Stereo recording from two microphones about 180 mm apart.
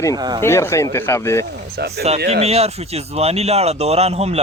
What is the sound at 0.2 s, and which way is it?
Speech, 20° right (ahead or behind).